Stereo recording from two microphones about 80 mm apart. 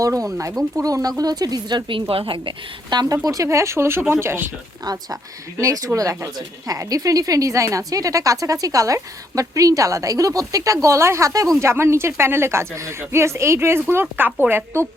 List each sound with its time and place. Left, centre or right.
0.0 s a woman's voice: right
3.2 s speech: right
5.5 s speech: right